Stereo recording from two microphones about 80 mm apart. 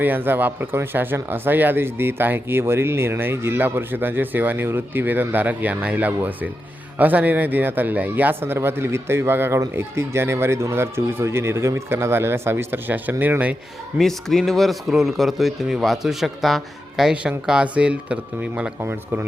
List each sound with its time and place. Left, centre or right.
0.0 s speech: right
14.0 s speech: centre
18.8 s speech: right